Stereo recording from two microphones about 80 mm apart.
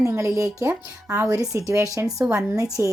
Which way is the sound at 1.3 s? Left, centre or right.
Right.